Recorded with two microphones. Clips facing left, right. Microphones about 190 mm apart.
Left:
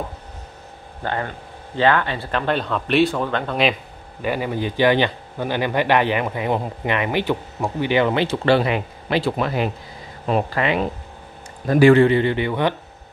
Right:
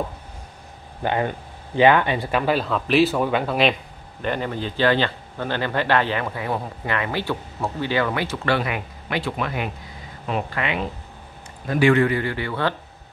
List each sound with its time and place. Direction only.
1.0 s speech: 15° right (ahead or behind)
4.2 s a man's voice: 10° left (ahead or behind)